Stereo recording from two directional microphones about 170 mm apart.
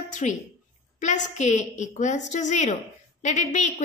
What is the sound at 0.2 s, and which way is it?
A woman's voice, 40° left (ahead or behind).